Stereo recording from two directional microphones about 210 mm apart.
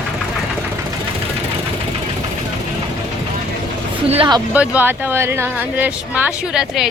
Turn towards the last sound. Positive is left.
turn(degrees=-5)  # may be behind; listen again after turning